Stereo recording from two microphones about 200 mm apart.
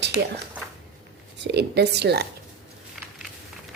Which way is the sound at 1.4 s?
55° right (ahead or behind).